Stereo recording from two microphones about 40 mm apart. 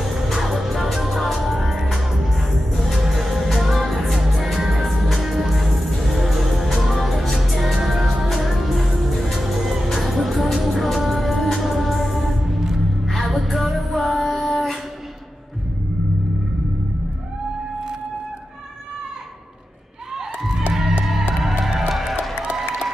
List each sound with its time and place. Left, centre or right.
0.0 s music: centre
20.2 s crowd: centre
21.0 s music: centre
22.3 s music: right